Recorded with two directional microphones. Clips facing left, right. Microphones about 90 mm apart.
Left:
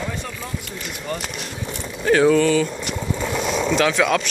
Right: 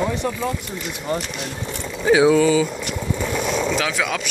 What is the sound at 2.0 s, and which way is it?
Speech, 10° right (ahead or behind).